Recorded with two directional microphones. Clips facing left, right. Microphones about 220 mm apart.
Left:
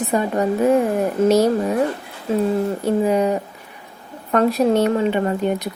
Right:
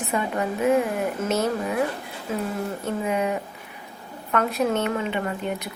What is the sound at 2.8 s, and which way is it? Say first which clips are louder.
Speech: left 7 dB; 35° left (ahead or behind).